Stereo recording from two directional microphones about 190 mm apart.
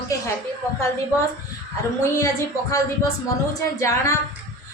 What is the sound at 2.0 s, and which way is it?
A woman's voice, 15° left (ahead or behind).